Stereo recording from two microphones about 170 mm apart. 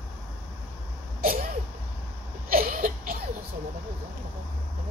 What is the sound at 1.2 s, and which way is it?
Sneeze, 60° right (ahead or behind).